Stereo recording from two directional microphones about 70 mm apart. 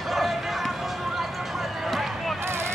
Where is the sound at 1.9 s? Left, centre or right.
Centre.